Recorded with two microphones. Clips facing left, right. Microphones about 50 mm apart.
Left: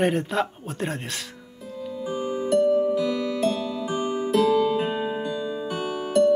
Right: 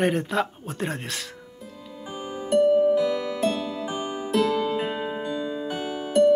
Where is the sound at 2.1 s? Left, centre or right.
Centre.